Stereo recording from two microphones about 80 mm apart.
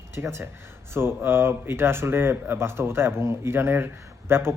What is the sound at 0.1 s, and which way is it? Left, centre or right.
A man's voice, right.